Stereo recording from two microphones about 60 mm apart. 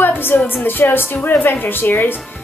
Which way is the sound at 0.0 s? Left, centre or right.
Left.